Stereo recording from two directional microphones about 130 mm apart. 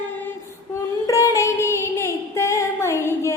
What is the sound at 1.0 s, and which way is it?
Music, 25° left (ahead or behind).